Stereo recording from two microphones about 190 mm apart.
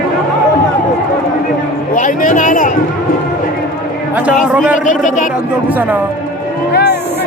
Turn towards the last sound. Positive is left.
turn(degrees=60)  # may be behind; listen again after turning